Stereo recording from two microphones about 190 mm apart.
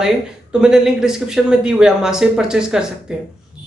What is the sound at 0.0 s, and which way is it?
Speech, 5° right (ahead or behind).